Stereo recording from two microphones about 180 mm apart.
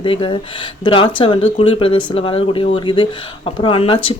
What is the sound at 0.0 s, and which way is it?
Speech, 30° left (ahead or behind).